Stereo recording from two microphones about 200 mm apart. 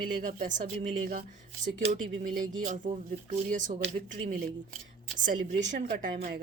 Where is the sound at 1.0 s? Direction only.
45° right (ahead or behind).